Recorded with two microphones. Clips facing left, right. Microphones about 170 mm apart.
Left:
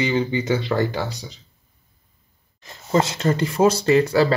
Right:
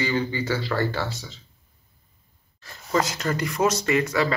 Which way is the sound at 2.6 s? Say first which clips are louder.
Left 4 dB; 25° left (ahead or behind).